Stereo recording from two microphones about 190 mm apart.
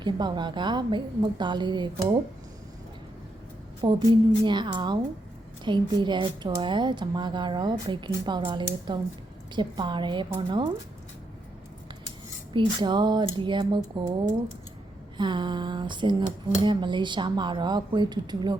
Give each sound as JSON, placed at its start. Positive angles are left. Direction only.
{"t": 0.0, "sound": "speech", "side_deg": -25}
{"t": 3.8, "sound": "speech", "side_deg": -25}
{"t": 12.5, "sound": "speech", "side_deg": -25}
{"t": 15.2, "sound": "speech", "side_deg": -25}